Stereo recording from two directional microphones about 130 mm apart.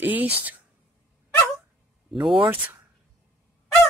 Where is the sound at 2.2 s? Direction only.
40° right (ahead or behind).